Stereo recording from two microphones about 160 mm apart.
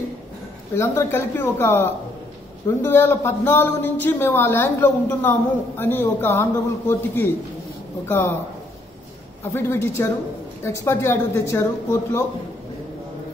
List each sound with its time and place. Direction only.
0.7 s a woman's voice: 15° left (ahead or behind)
9.4 s a woman's voice: 15° left (ahead or behind)